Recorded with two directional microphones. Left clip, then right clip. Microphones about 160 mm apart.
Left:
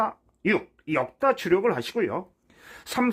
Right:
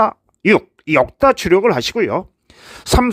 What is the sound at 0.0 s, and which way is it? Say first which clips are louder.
Speech: right 11 dB; 40° right (ahead or behind).